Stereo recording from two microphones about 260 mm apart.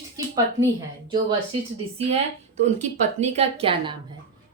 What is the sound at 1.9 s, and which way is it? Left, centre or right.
A woman's voice, right.